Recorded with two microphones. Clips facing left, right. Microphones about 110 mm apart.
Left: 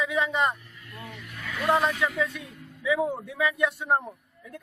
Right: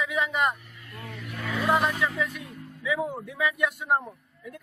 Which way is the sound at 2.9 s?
25° left (ahead or behind).